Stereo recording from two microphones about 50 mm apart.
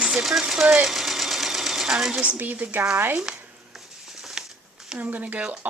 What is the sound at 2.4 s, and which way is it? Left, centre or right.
Speech, right.